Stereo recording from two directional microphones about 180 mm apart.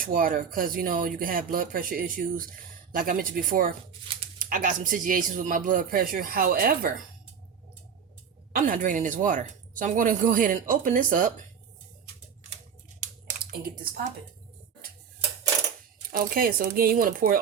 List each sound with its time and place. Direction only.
0.0 s speech: 50° right (ahead or behind)
4.1 s a sound: 30° right (ahead or behind)
4.4 s speech: 50° right (ahead or behind)
8.5 s speech: 50° right (ahead or behind)
13.4 s speech: 55° right (ahead or behind)
16.0 s speech: 55° right (ahead or behind)